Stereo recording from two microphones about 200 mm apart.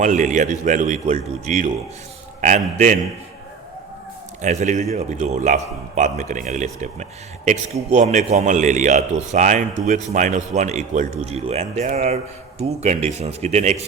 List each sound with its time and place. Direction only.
0.0 s a man's voice: 40° right (ahead or behind)
4.4 s a man's voice: 35° right (ahead or behind)